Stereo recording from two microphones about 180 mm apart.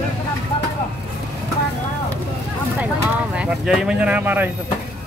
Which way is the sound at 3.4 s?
5° right (ahead or behind).